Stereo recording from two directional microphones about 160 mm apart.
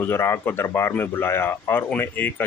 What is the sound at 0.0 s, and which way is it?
Speech, 15° left (ahead or behind).